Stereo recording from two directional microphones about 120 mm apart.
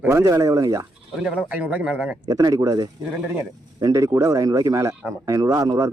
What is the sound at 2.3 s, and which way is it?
Speech, 25° right (ahead or behind).